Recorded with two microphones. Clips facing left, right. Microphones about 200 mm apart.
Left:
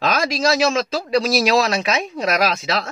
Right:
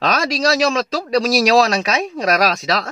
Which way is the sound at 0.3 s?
40° right (ahead or behind).